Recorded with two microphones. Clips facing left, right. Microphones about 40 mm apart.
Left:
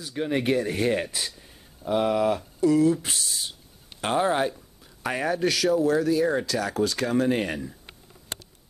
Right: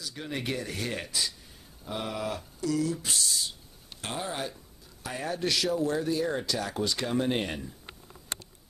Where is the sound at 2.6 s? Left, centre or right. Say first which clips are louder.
Left 9 dB; left.